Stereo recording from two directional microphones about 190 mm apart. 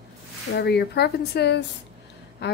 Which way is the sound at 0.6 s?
60° left (ahead or behind).